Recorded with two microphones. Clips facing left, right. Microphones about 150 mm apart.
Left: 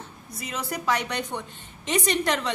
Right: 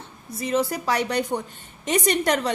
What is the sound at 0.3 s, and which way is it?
A woman's voice, 35° right (ahead or behind).